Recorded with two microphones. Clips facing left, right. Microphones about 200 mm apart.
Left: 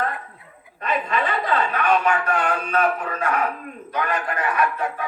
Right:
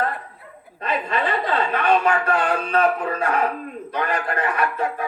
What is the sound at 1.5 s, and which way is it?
A woman's voice, 30° right (ahead or behind).